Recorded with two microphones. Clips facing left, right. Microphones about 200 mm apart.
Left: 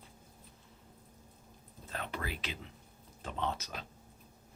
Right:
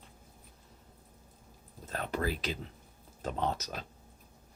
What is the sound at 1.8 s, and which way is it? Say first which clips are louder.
Speech: right 7 dB; 40° right (ahead or behind).